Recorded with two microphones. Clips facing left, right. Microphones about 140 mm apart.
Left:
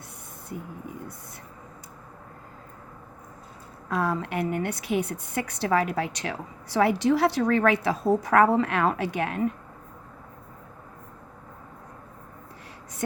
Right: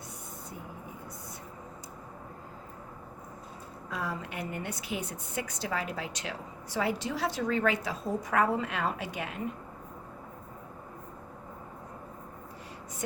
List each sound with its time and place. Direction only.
3.8 s a woman's voice: 65° left (ahead or behind)